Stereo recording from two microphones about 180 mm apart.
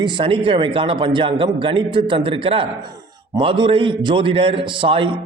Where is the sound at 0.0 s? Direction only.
25° right (ahead or behind).